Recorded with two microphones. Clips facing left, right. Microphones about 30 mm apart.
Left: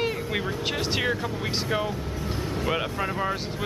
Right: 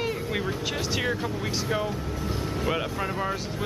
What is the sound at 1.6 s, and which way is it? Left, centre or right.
Speech, centre.